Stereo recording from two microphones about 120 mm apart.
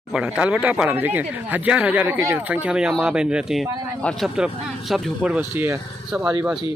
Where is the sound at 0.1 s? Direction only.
10° right (ahead or behind).